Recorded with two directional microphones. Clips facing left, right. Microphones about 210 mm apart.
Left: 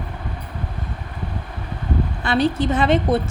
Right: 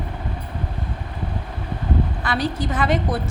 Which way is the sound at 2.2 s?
25° left (ahead or behind).